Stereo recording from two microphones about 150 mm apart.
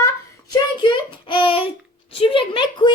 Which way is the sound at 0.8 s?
35° left (ahead or behind).